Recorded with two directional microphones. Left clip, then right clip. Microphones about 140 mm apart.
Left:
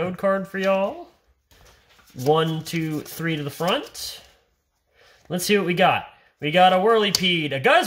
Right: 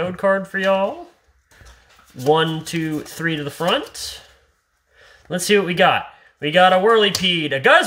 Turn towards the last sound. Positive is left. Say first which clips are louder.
# right 4 dB
turn(degrees=5)  # may be behind; listen again after turning